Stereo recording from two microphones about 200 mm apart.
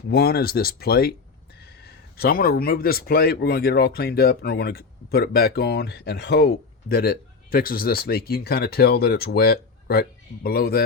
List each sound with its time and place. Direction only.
0.1 s speech: 55° left (ahead or behind)